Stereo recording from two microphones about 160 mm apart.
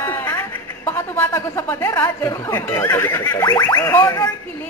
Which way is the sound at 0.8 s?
15° left (ahead or behind).